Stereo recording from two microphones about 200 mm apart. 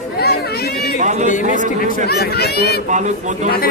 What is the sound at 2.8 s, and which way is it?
Speech, 35° right (ahead or behind).